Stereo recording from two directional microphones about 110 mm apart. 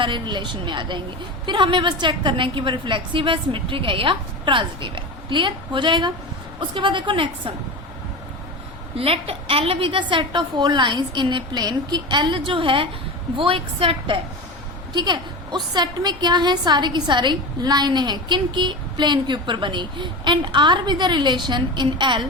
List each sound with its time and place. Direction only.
0.0 s a woman's voice: 45° right (ahead or behind)
9.0 s a woman's voice: 60° right (ahead or behind)
14.9 s a woman's voice: 45° right (ahead or behind)